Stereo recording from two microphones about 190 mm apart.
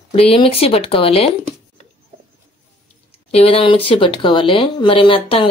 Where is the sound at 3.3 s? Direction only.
30° left (ahead or behind).